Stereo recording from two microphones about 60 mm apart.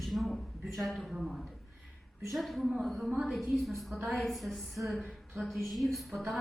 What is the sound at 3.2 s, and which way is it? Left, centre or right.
A woman's voice, centre.